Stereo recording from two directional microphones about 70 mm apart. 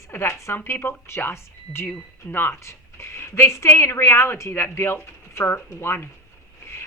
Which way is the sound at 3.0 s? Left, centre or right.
Left.